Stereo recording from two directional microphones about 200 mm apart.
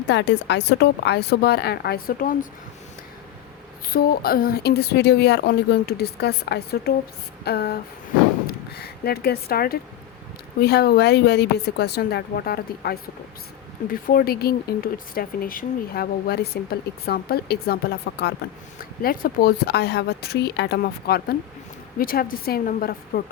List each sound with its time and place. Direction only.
0.1 s speech: 60° left (ahead or behind); by 2.5 s 45° left (ahead or behind)
3.9 s speech: 50° left (ahead or behind)
18.8 s speech: 45° left (ahead or behind)